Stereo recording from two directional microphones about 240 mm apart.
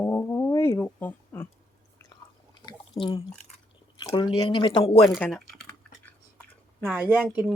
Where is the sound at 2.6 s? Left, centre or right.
Centre.